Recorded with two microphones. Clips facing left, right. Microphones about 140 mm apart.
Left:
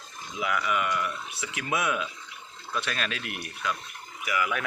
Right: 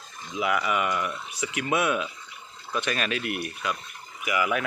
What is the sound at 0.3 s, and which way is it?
Speech, 5° right (ahead or behind).